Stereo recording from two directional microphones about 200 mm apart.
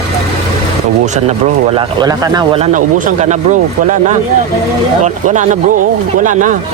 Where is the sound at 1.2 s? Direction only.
30° right (ahead or behind).